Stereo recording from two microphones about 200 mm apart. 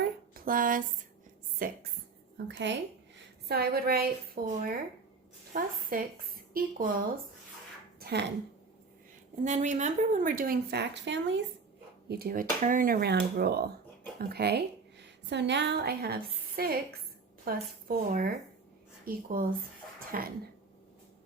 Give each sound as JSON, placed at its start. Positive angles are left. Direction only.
{"t": 0.0, "sound": "a sound", "side_deg": -45}
{"t": 1.6, "sound": "speech", "side_deg": -45}
{"t": 2.5, "sound": "a woman's voice", "side_deg": -65}
{"t": 7.9, "sound": "a sound", "side_deg": -50}
{"t": 9.4, "sound": "speech", "side_deg": -35}
{"t": 12.0, "sound": "a woman's voice", "side_deg": -50}